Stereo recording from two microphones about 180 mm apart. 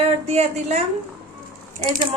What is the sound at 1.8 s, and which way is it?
Speech, 50° right (ahead or behind).